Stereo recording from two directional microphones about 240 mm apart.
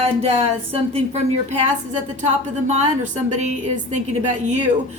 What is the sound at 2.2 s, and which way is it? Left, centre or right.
A woman's voice, right.